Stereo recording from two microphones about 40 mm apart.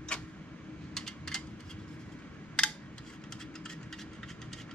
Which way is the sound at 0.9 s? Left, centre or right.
Centre.